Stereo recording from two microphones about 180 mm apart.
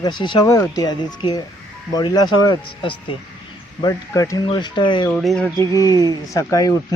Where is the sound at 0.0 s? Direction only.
25° left (ahead or behind).